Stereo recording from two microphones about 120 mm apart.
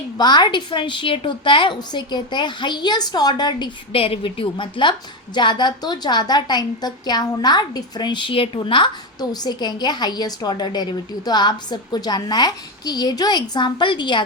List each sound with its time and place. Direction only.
0.2 s a woman's voice: 35° left (ahead or behind)
3.9 s a woman's voice: 50° left (ahead or behind)